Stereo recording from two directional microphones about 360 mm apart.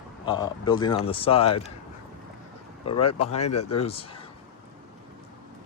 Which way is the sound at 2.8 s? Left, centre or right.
Centre.